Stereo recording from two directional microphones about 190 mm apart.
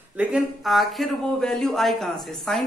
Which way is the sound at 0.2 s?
5° right (ahead or behind).